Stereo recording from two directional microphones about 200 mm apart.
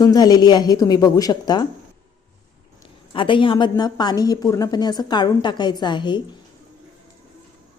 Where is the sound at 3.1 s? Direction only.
25° left (ahead or behind).